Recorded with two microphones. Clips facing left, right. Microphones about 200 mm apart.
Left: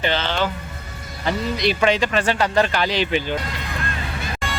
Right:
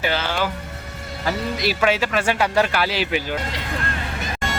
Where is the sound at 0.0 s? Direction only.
10° right (ahead or behind).